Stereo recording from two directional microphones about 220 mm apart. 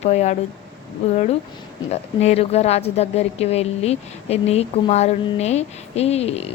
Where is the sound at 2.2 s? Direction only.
30° left (ahead or behind).